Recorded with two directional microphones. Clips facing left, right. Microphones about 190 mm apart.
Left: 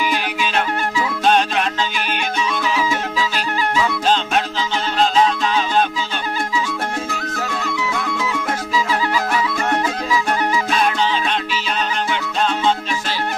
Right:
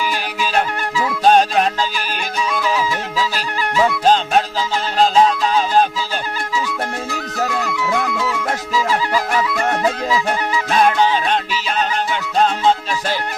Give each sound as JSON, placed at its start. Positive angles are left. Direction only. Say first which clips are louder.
{"t": 1.2, "sound": "music", "louder": "right 4 dB", "side_deg": -40}
{"t": 5.2, "sound": "music", "louder": "right 2 dB", "side_deg": -35}
{"t": 10.7, "sound": "music", "louder": "right 9 dB", "side_deg": -50}